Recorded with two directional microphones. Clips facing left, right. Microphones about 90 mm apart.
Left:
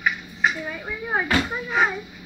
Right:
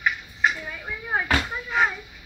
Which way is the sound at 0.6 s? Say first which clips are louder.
Left 4 dB; 20° left (ahead or behind).